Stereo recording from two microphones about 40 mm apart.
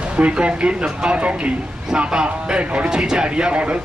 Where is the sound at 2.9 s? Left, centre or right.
Centre.